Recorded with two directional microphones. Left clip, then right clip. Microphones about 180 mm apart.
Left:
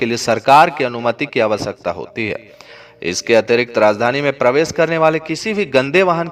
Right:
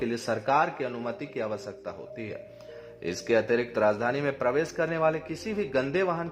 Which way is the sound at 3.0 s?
40° left (ahead or behind).